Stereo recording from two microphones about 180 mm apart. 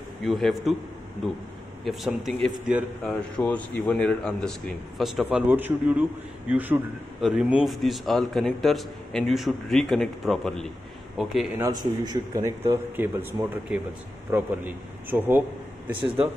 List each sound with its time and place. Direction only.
0.2 s a man's voice: centre (ahead or behind)
1.9 s a man's voice: centre (ahead or behind)
11.5 s speech: 20° right (ahead or behind)